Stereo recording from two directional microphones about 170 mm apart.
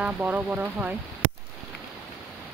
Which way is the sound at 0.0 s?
10° right (ahead or behind).